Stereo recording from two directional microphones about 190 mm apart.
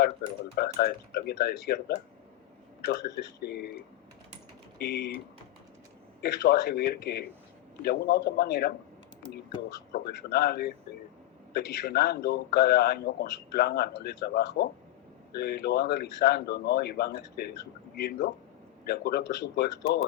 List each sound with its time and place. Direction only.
0.0 s speech: 55° left (ahead or behind)
2.8 s speech: 55° left (ahead or behind)
4.8 s speech: 60° left (ahead or behind)
6.2 s speech: 60° left (ahead or behind)